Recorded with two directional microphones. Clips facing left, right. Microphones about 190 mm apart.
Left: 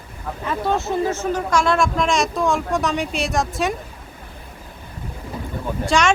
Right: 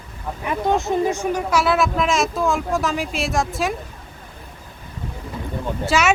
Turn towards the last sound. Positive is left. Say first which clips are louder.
# left 1 dB
turn(degrees=-5)  # may be behind; listen again after turning